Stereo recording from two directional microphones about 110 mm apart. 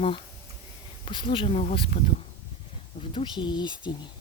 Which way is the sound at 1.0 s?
45° left (ahead or behind).